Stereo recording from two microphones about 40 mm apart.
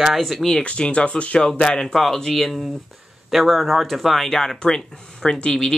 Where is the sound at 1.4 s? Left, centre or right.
Centre.